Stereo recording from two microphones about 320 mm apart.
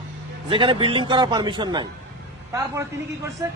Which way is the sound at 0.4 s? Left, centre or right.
Centre.